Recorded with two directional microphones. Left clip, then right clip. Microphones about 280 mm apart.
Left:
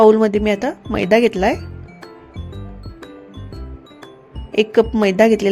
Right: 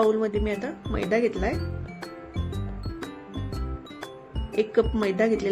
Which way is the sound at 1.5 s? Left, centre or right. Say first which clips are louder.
Left 2 dB; centre.